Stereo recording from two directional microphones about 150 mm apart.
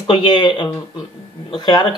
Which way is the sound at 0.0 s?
35° left (ahead or behind).